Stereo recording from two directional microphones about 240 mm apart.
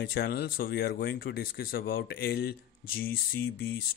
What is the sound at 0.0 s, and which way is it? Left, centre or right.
Speech, left.